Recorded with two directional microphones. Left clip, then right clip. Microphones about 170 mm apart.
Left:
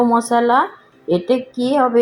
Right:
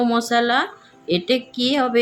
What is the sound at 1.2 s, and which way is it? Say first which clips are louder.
Speech: left 2 dB; 25° right (ahead or behind).